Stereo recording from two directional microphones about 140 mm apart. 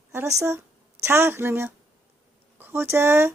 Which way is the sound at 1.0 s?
15° right (ahead or behind).